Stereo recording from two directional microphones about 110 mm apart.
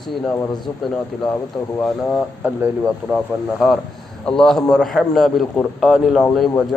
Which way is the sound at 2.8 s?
5° right (ahead or behind).